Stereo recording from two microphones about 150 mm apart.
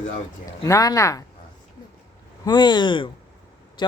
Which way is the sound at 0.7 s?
20° left (ahead or behind).